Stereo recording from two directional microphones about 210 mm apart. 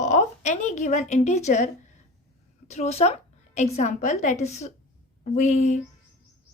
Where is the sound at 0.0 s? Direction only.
35° left (ahead or behind).